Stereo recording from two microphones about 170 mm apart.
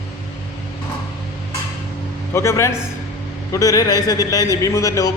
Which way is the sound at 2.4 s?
15° left (ahead or behind).